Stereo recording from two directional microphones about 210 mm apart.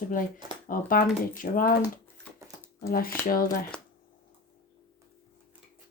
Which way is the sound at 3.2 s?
40° left (ahead or behind).